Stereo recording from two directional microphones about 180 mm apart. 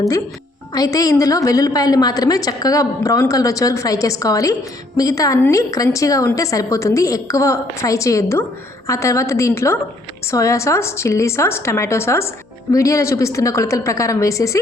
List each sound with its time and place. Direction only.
0.7 s a woman's voice: 20° left (ahead or behind)